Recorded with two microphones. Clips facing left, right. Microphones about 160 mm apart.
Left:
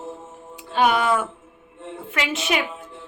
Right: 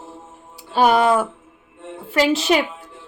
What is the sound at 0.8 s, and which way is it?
Speech, 35° right (ahead or behind).